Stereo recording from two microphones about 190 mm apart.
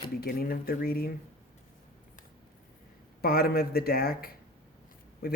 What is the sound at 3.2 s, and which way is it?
Speech, 55° left (ahead or behind).